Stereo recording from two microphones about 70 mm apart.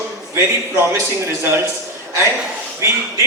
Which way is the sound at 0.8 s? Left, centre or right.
Right.